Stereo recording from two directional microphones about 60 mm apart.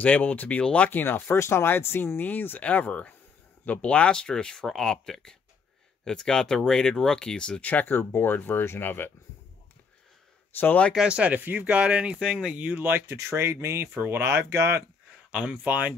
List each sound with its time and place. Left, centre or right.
0.0 s speech: left
0.8 s speech: left; by 7.6 s centre
7.6 s speech: left
10.5 s speech: left
11.0 s speech: centre
13.0 s speech: right
15.3 s speech: right